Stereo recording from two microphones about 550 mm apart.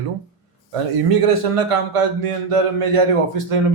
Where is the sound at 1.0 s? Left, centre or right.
Right.